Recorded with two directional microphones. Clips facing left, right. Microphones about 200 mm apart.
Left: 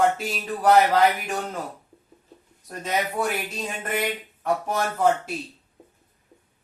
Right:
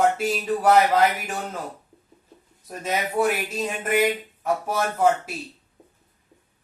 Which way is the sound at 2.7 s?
5° right (ahead or behind).